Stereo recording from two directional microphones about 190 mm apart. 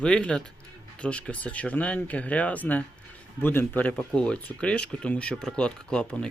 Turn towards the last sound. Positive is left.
turn(degrees=5)  # may be behind; listen again after turning